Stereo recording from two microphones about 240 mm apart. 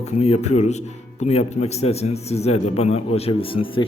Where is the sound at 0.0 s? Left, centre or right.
Left.